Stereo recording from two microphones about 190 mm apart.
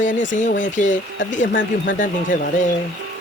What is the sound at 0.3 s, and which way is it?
Speech, 40° left (ahead or behind).